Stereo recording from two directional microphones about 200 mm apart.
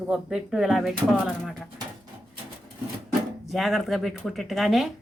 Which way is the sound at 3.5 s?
Centre (ahead or behind).